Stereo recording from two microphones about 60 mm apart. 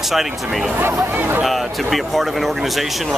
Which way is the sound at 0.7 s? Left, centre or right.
Right.